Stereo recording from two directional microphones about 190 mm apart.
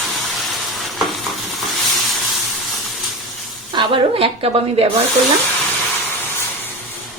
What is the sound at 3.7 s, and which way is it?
A woman's voice, 25° right (ahead or behind).